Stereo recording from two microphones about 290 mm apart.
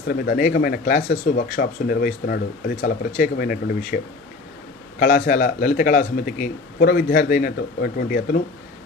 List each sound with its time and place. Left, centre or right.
0.1 s a man's voice: left